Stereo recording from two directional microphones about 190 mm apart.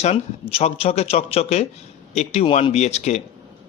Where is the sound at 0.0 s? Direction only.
35° left (ahead or behind).